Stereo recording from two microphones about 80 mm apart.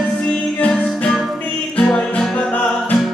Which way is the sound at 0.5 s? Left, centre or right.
Centre.